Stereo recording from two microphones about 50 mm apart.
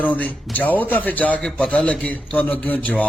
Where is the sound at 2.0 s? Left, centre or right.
Left.